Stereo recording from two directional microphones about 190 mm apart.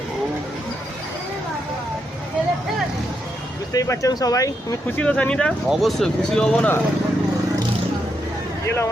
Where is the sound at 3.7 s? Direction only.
15° left (ahead or behind).